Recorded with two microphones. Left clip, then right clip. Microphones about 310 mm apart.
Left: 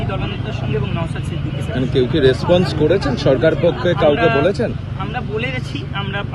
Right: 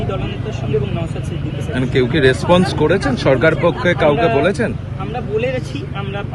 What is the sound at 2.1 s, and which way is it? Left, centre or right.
Speech, right.